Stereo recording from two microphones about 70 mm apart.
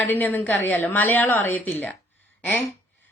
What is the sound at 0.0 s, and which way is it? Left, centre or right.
A woman's voice, left.